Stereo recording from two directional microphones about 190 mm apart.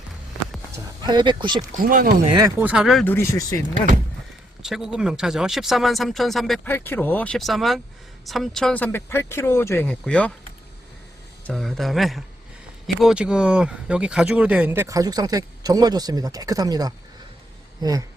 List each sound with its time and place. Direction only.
1.0 s speech: 25° right (ahead or behind)
1.8 s speech: 50° right (ahead or behind)
2.3 s speech: 15° right (ahead or behind); by 3.6 s 15° left (ahead or behind)
4.6 s speech: 5° right (ahead or behind)
11.4 s speech: centre (ahead or behind); by 18.0 s 20° right (ahead or behind)